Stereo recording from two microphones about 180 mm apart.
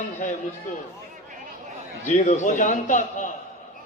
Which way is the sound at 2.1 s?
40° left (ahead or behind).